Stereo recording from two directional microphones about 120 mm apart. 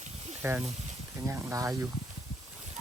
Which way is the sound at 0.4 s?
20° right (ahead or behind).